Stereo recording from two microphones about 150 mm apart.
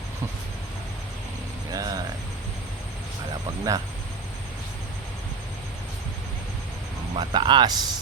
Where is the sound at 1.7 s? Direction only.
25° right (ahead or behind).